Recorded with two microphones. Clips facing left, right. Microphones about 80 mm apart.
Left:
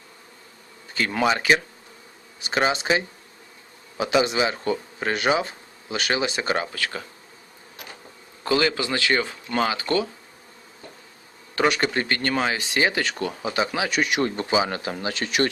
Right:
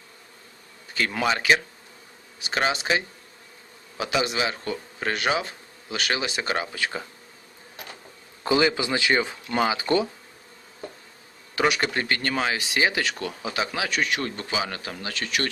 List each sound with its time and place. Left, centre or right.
0.9 s speech: centre
6.7 s speech: centre
8.4 s speech: centre
11.5 s speech: centre; by 15.4 s left